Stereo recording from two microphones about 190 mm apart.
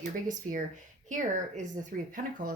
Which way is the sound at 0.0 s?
40° right (ahead or behind).